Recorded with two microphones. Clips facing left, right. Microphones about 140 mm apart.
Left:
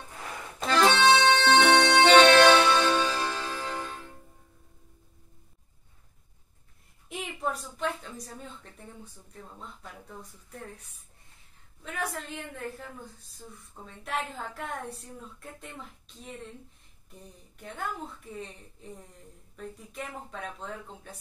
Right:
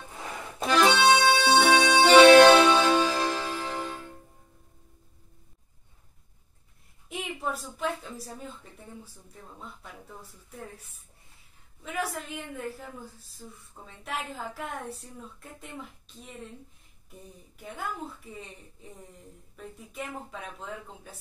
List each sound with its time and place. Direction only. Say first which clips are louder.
0.6 s music: right 1 dB; 10° right (ahead or behind)
7.1 s a woman's voice: even; centre (ahead or behind)